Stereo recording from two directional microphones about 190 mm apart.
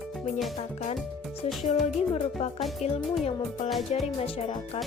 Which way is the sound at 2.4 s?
30° left (ahead or behind).